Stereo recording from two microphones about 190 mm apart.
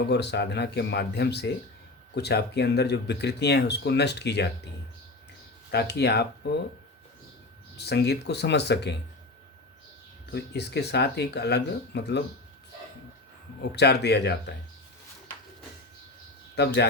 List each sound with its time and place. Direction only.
0.1 s speech: 60° left (ahead or behind)
5.7 s speech: 60° left (ahead or behind)
7.8 s speech: 60° left (ahead or behind)
10.3 s speech: 60° left (ahead or behind)
13.6 s speech: 60° left (ahead or behind)
16.6 s speech: 60° left (ahead or behind)